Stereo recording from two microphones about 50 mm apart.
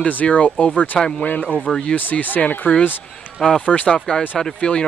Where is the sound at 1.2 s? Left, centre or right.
Left.